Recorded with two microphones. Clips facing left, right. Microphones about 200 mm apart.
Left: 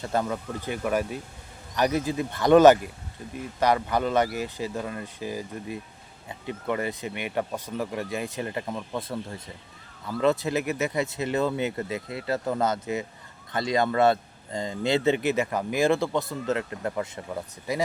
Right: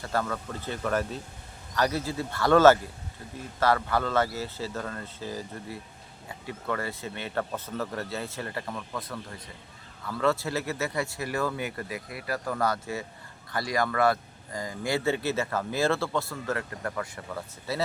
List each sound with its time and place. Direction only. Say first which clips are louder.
0.0 s speech: left 3 dB; 20° left (ahead or behind)